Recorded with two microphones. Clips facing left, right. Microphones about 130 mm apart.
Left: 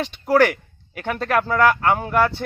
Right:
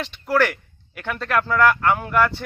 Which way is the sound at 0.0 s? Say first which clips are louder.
Left 4 dB; 50° left (ahead or behind).